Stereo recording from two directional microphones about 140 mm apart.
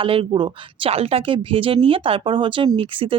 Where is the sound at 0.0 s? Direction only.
40° right (ahead or behind).